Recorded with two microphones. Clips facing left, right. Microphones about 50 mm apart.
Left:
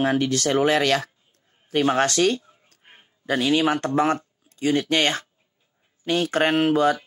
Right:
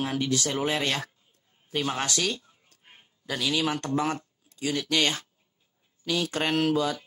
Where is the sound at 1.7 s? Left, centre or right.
Left.